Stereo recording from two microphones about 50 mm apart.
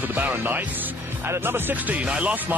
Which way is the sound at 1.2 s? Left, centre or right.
Right.